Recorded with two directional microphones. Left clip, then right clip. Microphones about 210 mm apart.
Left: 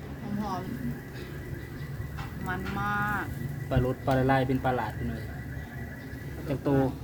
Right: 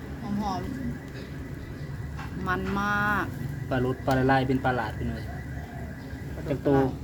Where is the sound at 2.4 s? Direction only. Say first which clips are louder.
Right 4 dB; 45° right (ahead or behind).